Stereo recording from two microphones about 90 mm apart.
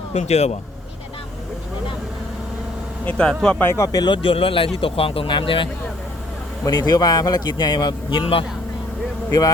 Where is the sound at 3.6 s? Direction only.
25° left (ahead or behind).